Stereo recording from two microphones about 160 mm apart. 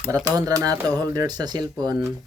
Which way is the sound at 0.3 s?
20° right (ahead or behind).